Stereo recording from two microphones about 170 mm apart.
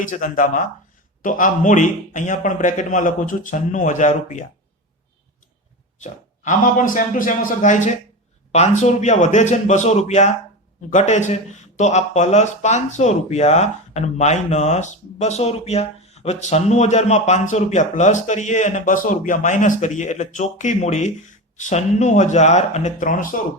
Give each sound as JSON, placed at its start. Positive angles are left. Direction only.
{"t": 0.0, "sound": "speech", "side_deg": 50}
{"t": 6.0, "sound": "speech", "side_deg": 45}